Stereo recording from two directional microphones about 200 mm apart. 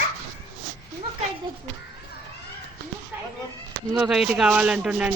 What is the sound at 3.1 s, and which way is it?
Speech, 10° right (ahead or behind).